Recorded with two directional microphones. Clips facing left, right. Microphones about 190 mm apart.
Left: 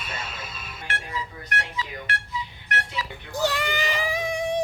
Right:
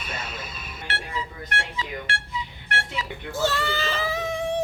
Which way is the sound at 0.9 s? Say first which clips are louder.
Right 1 dB; 30° right (ahead or behind).